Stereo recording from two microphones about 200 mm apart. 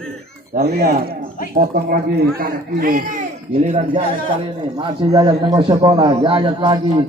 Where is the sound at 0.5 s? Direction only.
50° right (ahead or behind).